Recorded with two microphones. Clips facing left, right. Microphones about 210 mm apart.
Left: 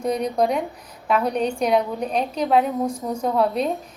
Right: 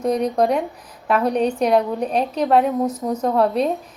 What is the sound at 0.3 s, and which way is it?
Speech, 5° right (ahead or behind).